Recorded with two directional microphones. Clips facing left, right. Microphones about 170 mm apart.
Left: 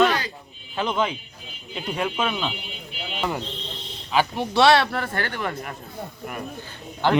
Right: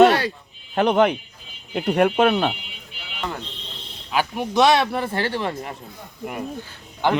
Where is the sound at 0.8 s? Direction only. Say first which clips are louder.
Right 7 dB; 65° right (ahead or behind).